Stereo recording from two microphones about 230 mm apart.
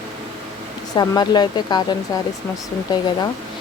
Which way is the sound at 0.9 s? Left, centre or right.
Centre.